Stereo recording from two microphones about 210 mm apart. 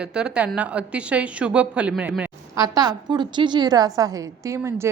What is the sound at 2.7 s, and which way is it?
A woman's voice, 20° right (ahead or behind).